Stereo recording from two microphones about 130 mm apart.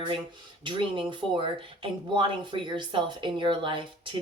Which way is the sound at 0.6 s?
40° right (ahead or behind).